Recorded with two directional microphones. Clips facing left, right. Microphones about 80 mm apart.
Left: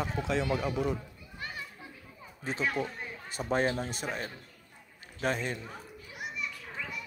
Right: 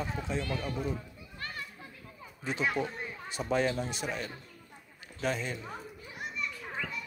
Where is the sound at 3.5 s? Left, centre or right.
Left.